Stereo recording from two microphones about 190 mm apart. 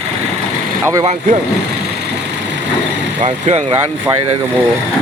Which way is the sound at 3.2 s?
35° right (ahead or behind).